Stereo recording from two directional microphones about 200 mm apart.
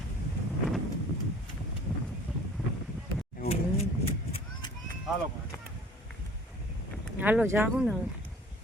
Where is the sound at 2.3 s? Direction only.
5° right (ahead or behind).